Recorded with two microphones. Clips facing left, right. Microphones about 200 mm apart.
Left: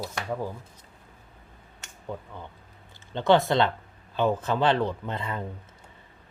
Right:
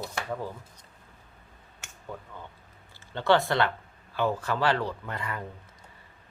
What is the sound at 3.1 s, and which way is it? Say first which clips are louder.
Speech: left 3 dB; 20° left (ahead or behind).